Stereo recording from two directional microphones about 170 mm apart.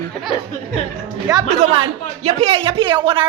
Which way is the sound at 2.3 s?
35° right (ahead or behind).